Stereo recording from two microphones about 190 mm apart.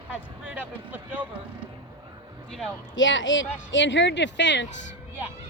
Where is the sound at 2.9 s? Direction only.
80° left.